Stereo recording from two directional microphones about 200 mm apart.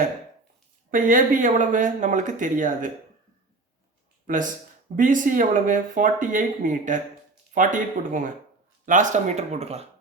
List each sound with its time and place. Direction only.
0.9 s speech: 40° right (ahead or behind)
4.9 s speech: 40° right (ahead or behind)